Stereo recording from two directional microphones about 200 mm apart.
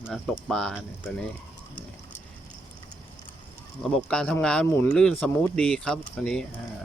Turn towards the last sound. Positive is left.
turn(degrees=5)  # may be behind; listen again after turning